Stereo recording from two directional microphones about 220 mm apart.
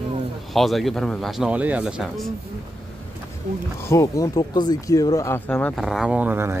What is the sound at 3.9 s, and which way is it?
Speech, 15° left (ahead or behind).